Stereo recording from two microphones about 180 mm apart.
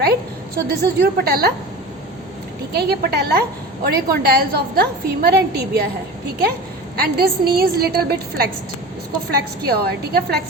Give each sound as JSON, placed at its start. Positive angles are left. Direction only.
{"t": 0.7, "sound": "a woman's voice", "side_deg": -60}
{"t": 2.7, "sound": "a woman's voice", "side_deg": -65}
{"t": 7.0, "sound": "a woman's voice", "side_deg": -60}